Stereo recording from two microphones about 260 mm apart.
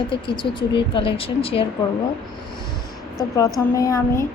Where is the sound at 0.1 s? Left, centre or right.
Centre.